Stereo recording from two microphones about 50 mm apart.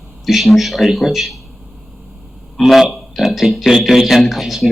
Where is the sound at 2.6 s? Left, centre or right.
Centre.